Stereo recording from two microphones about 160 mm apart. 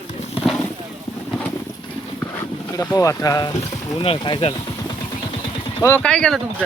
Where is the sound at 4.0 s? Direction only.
35° left (ahead or behind).